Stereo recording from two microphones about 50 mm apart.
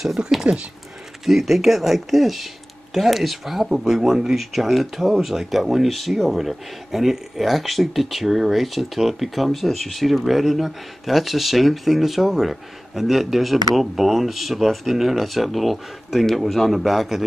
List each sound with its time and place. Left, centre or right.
0.4 s speech: centre
1.2 s speech: centre